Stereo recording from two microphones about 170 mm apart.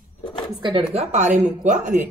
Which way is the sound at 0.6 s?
30° right (ahead or behind).